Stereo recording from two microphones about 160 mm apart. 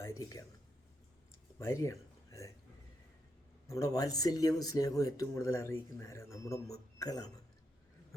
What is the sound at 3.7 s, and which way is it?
Speech, 20° left (ahead or behind).